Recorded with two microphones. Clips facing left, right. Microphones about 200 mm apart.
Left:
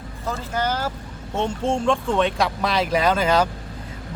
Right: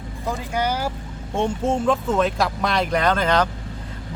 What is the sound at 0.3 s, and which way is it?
Speech, 15° right (ahead or behind).